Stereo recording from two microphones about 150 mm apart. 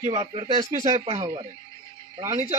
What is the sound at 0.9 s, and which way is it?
Speech, 45° right (ahead or behind).